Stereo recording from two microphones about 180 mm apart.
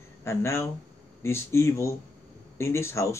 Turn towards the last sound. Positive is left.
turn(degrees=15)  # may be behind; listen again after turning